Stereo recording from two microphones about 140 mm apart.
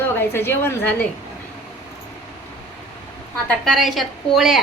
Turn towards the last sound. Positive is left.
turn(degrees=0)  # may be behind; listen again after turning